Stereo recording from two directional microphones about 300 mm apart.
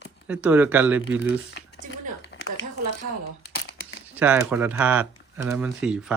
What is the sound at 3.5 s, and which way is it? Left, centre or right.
Crumpling, left.